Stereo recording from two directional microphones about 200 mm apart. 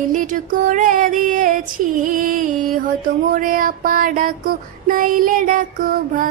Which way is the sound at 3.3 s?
45° right (ahead or behind).